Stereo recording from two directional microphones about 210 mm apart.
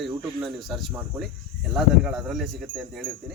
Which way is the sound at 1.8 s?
5° right (ahead or behind).